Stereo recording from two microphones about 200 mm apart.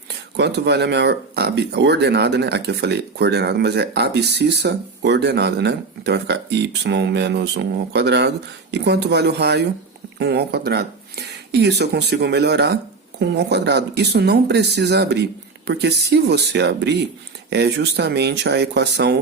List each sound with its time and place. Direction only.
0.1 s speech: 55° right (ahead or behind)